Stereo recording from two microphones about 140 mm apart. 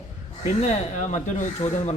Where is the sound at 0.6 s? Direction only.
60° left (ahead or behind).